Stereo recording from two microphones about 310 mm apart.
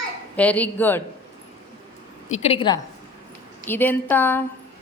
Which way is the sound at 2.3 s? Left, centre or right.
Centre.